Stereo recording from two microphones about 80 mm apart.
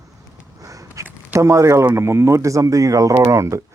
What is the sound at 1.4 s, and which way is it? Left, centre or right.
Speech, right.